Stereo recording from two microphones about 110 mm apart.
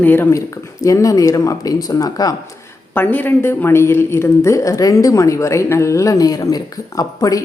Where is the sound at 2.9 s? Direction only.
15° left (ahead or behind).